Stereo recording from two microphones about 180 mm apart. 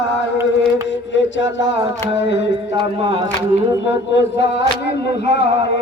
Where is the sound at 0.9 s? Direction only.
90° left.